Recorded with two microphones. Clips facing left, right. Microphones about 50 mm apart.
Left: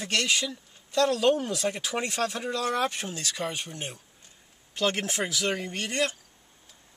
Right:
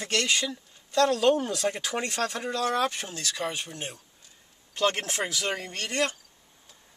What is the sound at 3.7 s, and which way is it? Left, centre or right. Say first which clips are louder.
Speech: even; centre.